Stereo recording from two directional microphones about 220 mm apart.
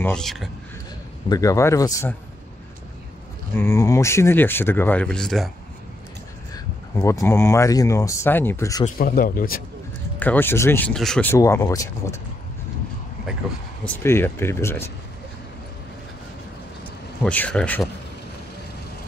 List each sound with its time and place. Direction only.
0.0 s a man's voice: 5° left (ahead or behind)
1.3 s speech: 15° left (ahead or behind)
3.5 s speech: 15° left (ahead or behind)
6.5 s speech: 15° left (ahead or behind)
8.8 s speech: 40° left (ahead or behind)
10.1 s speech: 10° left (ahead or behind)
13.8 s speech: 10° left (ahead or behind)
17.2 s speech: 5° left (ahead or behind)